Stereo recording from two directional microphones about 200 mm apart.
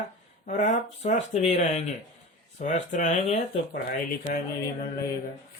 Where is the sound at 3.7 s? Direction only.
50° left (ahead or behind).